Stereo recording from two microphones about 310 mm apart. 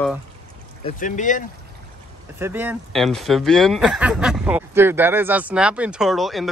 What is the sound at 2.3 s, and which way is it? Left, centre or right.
Speech, centre.